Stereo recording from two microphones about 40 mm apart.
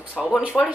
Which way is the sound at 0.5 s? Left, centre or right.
Left.